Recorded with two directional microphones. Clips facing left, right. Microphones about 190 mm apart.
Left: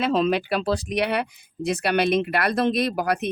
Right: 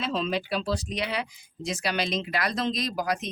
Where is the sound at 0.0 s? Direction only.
60° left (ahead or behind).